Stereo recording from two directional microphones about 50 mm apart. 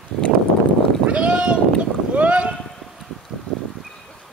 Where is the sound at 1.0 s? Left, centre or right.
Right.